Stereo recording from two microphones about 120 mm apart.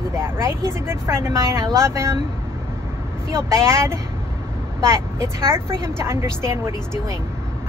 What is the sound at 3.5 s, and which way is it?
Speech, 20° right (ahead or behind).